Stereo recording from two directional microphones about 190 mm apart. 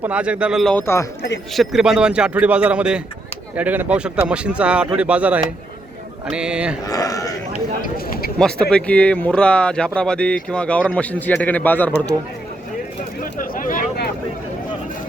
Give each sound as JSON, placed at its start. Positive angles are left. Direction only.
{"t": 0.0, "sound": "speech", "side_deg": -5}
{"t": 1.5, "sound": "speech", "side_deg": 0}
{"t": 6.8, "sound": "a sound", "side_deg": 20}
{"t": 7.8, "sound": "speech", "side_deg": 50}
{"t": 8.4, "sound": "speech", "side_deg": 5}
{"t": 13.4, "sound": "a sound", "side_deg": 45}